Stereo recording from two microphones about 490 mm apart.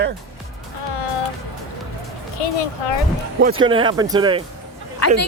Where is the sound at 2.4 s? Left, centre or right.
Left.